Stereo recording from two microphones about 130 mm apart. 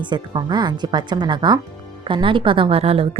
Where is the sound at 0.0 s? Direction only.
35° right (ahead or behind).